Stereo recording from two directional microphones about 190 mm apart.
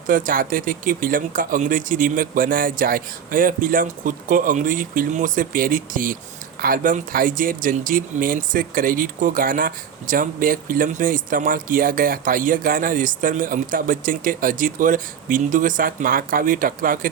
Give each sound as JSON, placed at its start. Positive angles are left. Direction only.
{"t": 0.1, "sound": "speech", "side_deg": -45}